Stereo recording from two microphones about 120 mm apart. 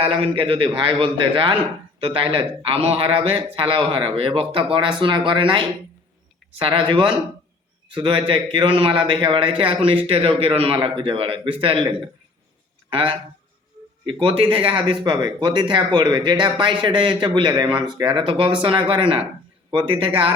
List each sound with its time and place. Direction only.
0.0 s a man's voice: 50° right (ahead or behind)
12.9 s a man's voice: 45° right (ahead or behind)